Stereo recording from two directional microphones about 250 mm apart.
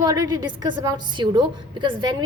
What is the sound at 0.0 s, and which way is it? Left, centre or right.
A woman's voice, centre.